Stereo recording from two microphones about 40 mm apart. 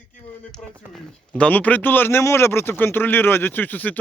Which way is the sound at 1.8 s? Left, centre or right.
Left.